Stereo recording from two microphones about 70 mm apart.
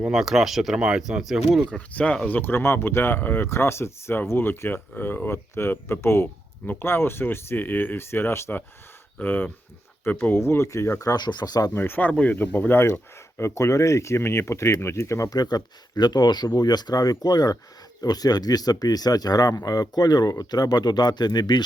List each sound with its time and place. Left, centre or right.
0.1 s speech: centre
2.2 s speech: left
9.2 s speech: left
10.3 s speech: left
11.1 s speech: left
11.7 s speech: left
13.4 s speech: left
15.3 s speech: left